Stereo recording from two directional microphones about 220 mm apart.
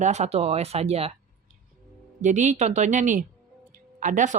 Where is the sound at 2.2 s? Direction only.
35° right (ahead or behind).